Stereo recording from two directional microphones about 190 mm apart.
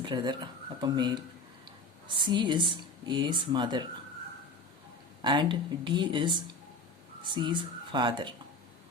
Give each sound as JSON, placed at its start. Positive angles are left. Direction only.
{"t": 0.0, "sound": "speech", "side_deg": -25}
{"t": 2.2, "sound": "speech", "side_deg": -25}
{"t": 5.2, "sound": "a woman's voice", "side_deg": -25}